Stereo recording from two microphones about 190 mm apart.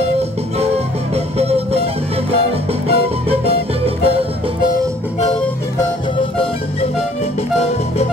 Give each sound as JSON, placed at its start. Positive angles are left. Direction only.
{"t": 1.1, "sound": "music", "side_deg": -30}
{"t": 2.9, "sound": "music", "side_deg": -30}